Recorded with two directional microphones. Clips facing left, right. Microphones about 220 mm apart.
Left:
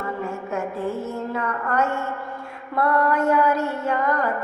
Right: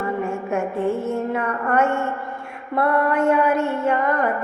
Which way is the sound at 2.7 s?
25° right (ahead or behind).